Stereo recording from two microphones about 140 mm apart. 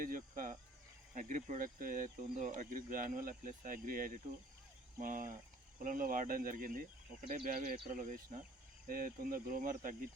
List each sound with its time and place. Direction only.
0.0 s speech: 80° right
1.1 s speech: 65° right (ahead or behind)
8.9 s speech: 80° right